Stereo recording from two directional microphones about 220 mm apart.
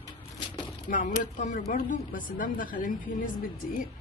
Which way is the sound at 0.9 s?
35° left (ahead or behind).